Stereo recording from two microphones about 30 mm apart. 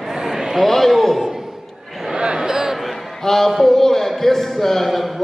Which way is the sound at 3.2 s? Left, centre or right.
Centre.